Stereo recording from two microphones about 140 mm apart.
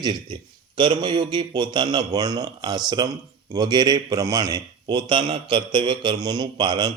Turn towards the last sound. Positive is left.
turn(degrees=-35)  # may be behind; listen again after turning